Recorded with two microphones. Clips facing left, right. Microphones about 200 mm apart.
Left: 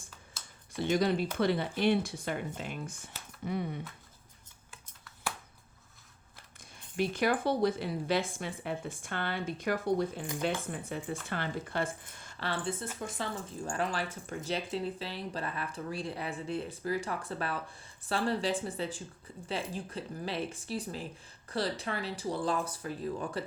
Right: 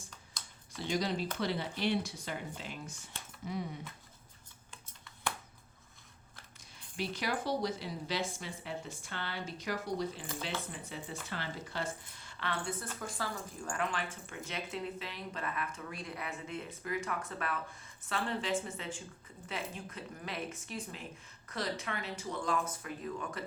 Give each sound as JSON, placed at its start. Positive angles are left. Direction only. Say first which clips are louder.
{"t": 0.8, "sound": "speech", "louder": "left 6 dB", "side_deg": 55}
{"t": 4.7, "sound": "shuffling cards", "louder": "even", "side_deg": 5}
{"t": 6.9, "sound": "speech", "louder": "left 7 dB", "side_deg": 50}
{"t": 12.4, "sound": "speech", "louder": "left 3 dB", "side_deg": 30}